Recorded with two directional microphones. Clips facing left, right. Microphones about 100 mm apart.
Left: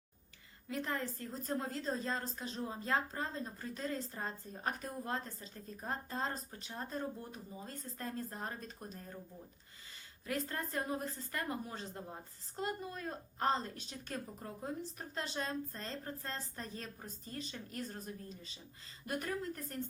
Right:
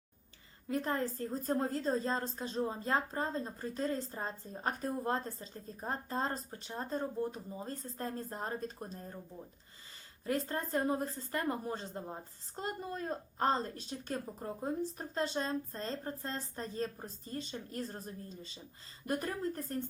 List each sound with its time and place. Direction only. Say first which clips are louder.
0.7 s a woman's voice: right 5 dB; 35° right (ahead or behind)
10.2 s a woman's voice: right 4 dB; 30° right (ahead or behind)